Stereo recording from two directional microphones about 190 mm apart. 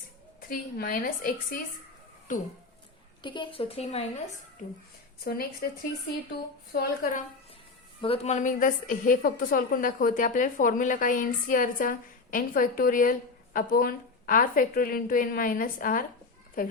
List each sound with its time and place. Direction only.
0.5 s a woman's voice: 45° left (ahead or behind)
3.2 s a woman's voice: 25° left (ahead or behind)
5.2 s a woman's voice: 55° left (ahead or behind)
6.7 s a woman's voice: 45° left (ahead or behind)
8.0 s a woman's voice: 30° left (ahead or behind); by 16.7 s 50° left (ahead or behind)